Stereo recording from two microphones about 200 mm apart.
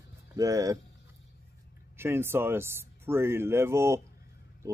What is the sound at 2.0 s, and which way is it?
Speech, 10° right (ahead or behind).